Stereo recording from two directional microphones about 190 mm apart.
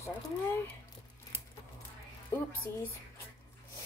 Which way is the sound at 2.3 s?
15° left (ahead or behind).